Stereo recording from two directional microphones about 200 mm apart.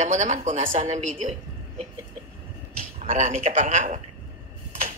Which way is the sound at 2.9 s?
35° right (ahead or behind).